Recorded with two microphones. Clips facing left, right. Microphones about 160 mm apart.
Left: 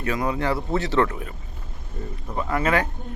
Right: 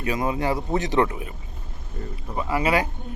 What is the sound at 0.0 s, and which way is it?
Speech, 20° right (ahead or behind).